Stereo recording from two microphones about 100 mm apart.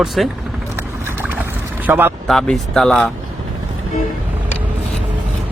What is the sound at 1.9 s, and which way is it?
Speech, 20° right (ahead or behind).